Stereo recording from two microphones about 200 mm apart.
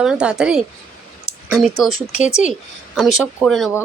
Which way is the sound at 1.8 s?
Centre (ahead or behind).